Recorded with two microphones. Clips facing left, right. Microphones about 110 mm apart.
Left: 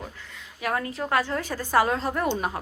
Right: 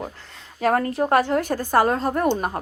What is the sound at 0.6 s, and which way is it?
A woman's voice, 45° right (ahead or behind).